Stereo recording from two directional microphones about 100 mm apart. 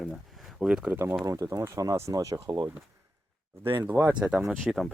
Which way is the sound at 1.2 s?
35° right (ahead or behind).